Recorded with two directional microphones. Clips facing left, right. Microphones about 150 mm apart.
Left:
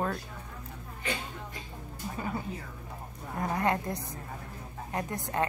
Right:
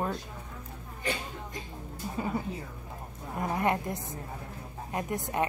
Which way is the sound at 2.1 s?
20° right (ahead or behind).